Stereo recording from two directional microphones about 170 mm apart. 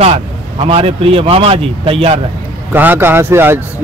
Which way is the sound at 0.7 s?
35° right (ahead or behind).